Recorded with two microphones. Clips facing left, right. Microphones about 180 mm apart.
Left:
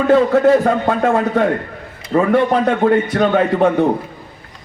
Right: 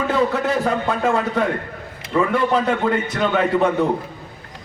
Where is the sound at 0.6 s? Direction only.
55° left (ahead or behind).